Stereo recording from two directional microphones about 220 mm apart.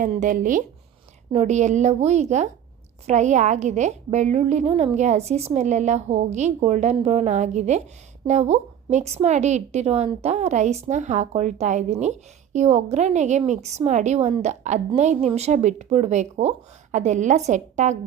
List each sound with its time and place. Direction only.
0.0 s a woman's voice: 35° right (ahead or behind)